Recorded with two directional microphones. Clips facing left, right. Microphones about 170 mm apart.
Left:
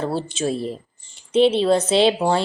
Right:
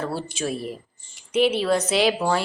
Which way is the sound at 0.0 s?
25° left (ahead or behind).